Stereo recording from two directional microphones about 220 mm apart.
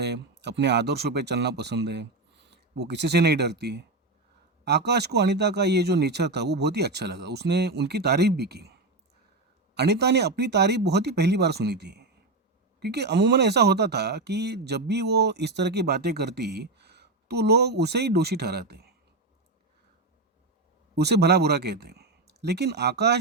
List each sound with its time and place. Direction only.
0.0 s speech: 50° right (ahead or behind)
20.9 s speech: 50° right (ahead or behind)